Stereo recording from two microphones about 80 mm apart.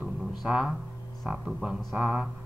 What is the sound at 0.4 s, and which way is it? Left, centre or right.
Speech, centre.